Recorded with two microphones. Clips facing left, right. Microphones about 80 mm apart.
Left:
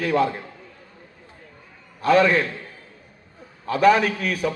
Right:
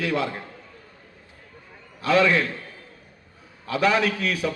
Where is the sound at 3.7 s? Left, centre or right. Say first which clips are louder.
Left 4 dB; left.